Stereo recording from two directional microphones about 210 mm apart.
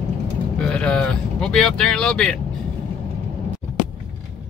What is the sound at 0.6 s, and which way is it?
Speech, 5° left (ahead or behind).